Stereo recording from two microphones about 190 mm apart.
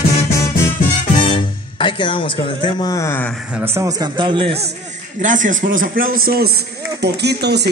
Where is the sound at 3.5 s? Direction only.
15° right (ahead or behind); by 4.6 s 30° right (ahead or behind).